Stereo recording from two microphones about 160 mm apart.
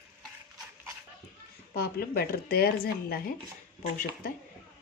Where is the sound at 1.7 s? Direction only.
75° left (ahead or behind).